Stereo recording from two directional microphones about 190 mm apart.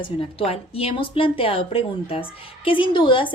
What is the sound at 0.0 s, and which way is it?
A woman's voice, 30° left (ahead or behind).